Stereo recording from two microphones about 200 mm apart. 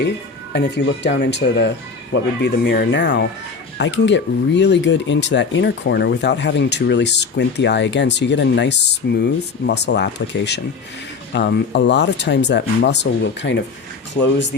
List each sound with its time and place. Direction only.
0.5 s speech: 60° left (ahead or behind)